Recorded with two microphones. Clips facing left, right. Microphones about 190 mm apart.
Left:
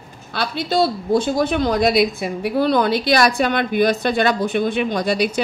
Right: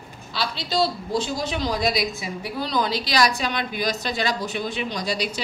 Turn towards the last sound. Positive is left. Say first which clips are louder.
# left 8 dB
turn(degrees=55)  # may be behind; listen again after turning